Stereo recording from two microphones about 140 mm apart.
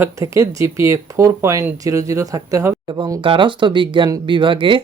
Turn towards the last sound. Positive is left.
turn(degrees=-35)  # may be behind; listen again after turning